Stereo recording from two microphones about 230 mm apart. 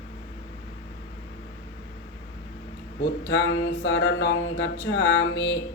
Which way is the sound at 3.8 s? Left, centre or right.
Left.